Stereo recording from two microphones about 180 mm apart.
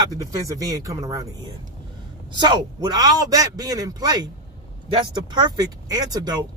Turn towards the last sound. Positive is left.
turn(degrees=-20)  # may be behind; listen again after turning